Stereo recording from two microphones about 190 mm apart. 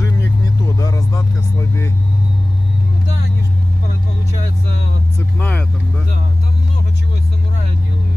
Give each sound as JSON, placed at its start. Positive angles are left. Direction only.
{"t": 0.7, "sound": "music", "side_deg": 20}
{"t": 5.4, "sound": "vehicle", "side_deg": 5}